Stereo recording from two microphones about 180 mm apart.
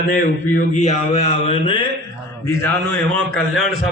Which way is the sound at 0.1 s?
45° left (ahead or behind).